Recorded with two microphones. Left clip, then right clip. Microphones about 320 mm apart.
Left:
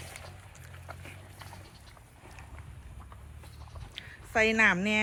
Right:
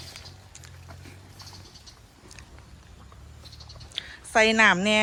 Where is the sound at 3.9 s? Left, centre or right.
Centre.